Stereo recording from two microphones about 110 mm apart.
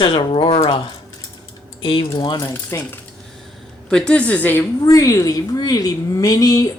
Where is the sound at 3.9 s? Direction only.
10° left (ahead or behind).